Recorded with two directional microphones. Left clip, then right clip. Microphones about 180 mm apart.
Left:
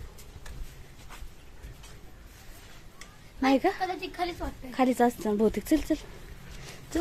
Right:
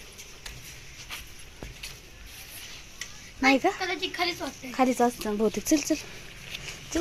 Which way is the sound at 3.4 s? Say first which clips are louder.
Right 2 dB; 5° left (ahead or behind).